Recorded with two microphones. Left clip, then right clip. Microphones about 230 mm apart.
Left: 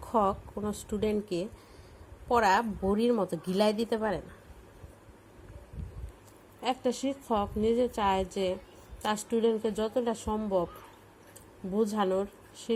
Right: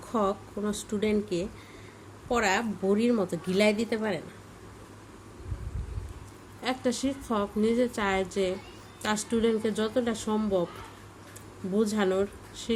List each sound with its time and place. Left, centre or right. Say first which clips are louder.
0.1 s a woman's voice: left 1 dB; centre
6.6 s a woman's voice: right 1 dB; centre
11.8 s a woman's voice: right 2 dB; centre